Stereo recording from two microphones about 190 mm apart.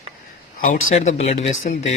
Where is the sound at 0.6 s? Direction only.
45° left (ahead or behind).